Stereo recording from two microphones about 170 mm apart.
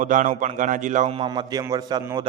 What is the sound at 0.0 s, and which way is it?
A man's voice, 50° right (ahead or behind).